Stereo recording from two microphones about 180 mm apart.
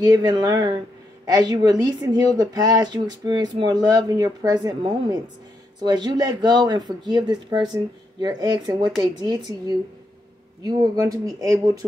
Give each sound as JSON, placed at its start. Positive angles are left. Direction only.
{"t": 0.0, "sound": "speech", "side_deg": -20}